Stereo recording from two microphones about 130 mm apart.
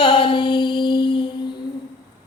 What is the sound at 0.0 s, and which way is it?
Mantra, 40° left (ahead or behind).